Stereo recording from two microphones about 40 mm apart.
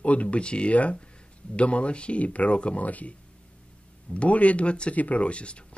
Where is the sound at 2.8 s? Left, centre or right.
Left.